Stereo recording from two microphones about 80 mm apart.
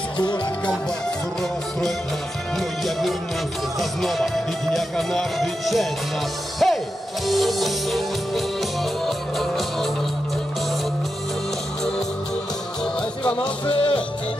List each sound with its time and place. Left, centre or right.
2.8 s music: centre
13.2 s music: centre
13.7 s music: left